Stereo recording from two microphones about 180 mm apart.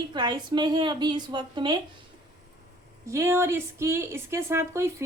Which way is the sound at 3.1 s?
15° right (ahead or behind).